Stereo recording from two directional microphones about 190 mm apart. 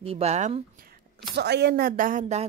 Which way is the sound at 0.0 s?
35° right (ahead or behind).